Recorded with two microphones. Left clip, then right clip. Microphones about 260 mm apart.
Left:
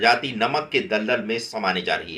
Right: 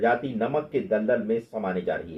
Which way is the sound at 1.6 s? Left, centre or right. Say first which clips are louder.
Left 5 dB; left.